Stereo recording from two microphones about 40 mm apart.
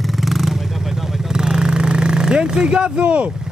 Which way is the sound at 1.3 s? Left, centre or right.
Centre.